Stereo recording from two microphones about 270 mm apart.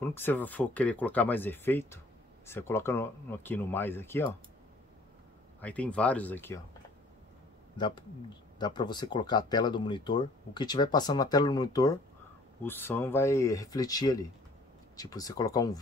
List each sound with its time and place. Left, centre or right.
0.0 s speech: centre
5.6 s speech: centre
7.7 s speech: centre